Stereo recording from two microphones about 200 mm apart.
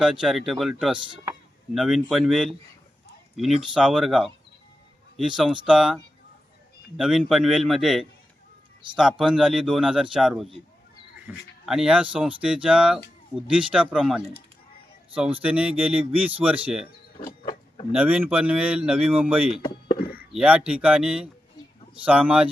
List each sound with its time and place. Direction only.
0.0 s a man's voice: 5° right (ahead or behind)
15.4 s speech: 5° right (ahead or behind)
17.4 s vehicle: 25° left (ahead or behind)
17.9 s speech: 10° right (ahead or behind)